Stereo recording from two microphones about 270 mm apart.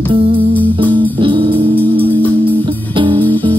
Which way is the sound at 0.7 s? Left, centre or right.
Centre.